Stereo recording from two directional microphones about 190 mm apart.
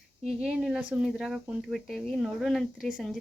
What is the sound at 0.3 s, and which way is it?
Speech, centre (ahead or behind).